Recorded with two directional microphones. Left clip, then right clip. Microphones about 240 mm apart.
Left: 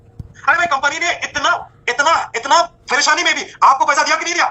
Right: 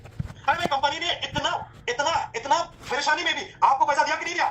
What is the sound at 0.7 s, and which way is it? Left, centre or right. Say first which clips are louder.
Speech: left 8 dB; left.